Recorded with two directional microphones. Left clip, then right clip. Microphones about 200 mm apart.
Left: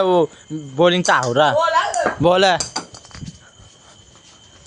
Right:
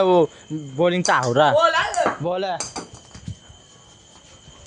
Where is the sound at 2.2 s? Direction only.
40° left (ahead or behind).